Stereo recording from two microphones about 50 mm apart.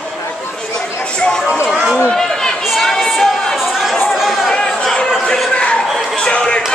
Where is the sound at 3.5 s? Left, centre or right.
Centre.